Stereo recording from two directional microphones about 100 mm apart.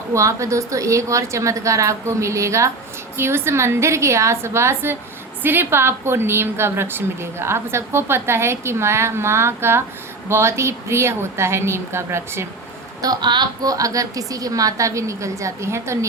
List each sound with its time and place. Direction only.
0.1 s a woman's voice: 30° right (ahead or behind)
13.0 s a woman's voice: 45° right (ahead or behind); by 16.0 s 30° right (ahead or behind)